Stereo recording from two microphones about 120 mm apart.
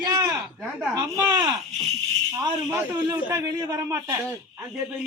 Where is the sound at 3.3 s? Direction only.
25° right (ahead or behind).